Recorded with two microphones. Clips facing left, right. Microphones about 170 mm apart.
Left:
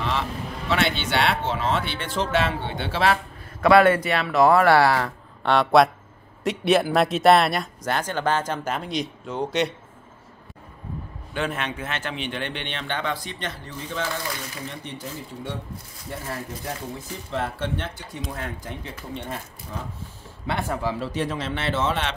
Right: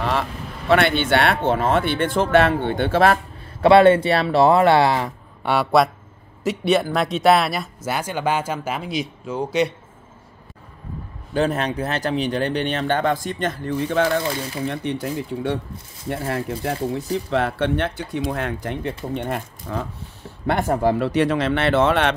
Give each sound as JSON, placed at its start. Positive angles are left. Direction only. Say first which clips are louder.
{"t": 0.0, "sound": "speech", "louder": "right 3 dB", "side_deg": -55}
{"t": 3.6, "sound": "speech", "louder": "right 4 dB", "side_deg": -25}
{"t": 5.4, "sound": "speech", "louder": "even", "side_deg": -5}
{"t": 11.3, "sound": "speech", "louder": "right 7 dB", "side_deg": -40}
{"t": 20.4, "sound": "speech", "louder": "right 7 dB", "side_deg": -45}